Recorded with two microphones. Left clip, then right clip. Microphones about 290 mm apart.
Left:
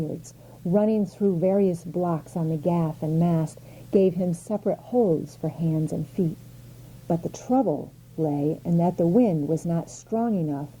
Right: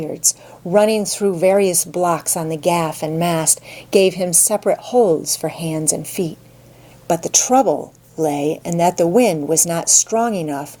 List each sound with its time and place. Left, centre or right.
0.2 s a woman's voice: centre
4.9 s speech: right
5.4 s a woman's voice: centre
7.3 s a woman's voice: centre